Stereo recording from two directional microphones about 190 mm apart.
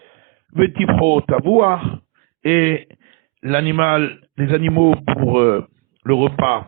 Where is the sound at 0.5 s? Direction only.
45° right (ahead or behind).